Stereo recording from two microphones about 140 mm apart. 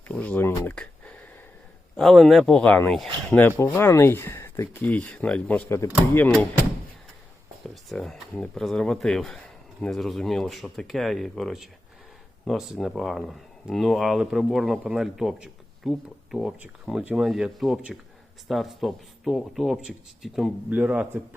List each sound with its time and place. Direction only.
0.1 s speech: 10° left (ahead or behind)
3.2 s speech: 15° left (ahead or behind)
5.6 s speech: 20° left (ahead or behind)
7.9 s speech: 5° left (ahead or behind)